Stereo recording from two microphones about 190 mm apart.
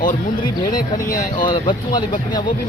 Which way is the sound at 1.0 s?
45° left (ahead or behind).